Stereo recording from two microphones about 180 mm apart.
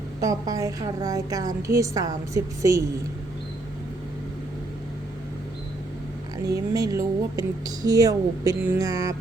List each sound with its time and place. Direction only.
0.2 s speech: 20° right (ahead or behind)
6.5 s speech: 20° right (ahead or behind)